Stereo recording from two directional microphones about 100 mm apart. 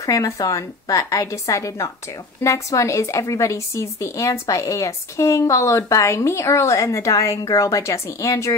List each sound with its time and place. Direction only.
0.0 s a woman's voice: 35° left (ahead or behind)